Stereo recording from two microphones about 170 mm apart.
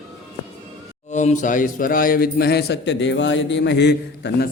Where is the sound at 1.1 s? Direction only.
45° left (ahead or behind); by 4.5 s 75° left (ahead or behind).